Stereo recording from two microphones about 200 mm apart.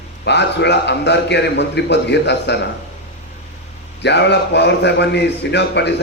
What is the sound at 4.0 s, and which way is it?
A man's voice, 60° left (ahead or behind).